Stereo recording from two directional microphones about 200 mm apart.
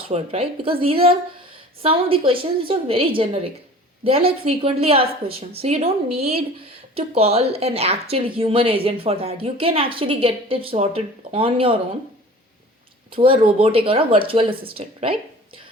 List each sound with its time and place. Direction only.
0.1 s a woman's voice: 30° right (ahead or behind)
13.1 s speech: 25° right (ahead or behind)